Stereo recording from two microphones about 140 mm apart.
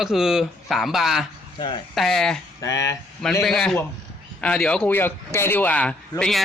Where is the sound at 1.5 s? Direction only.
35° left (ahead or behind).